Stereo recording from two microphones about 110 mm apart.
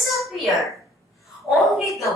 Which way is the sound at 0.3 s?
Centre (ahead or behind).